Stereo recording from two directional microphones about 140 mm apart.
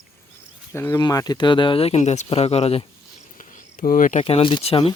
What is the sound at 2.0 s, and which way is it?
Speech, 55° left (ahead or behind).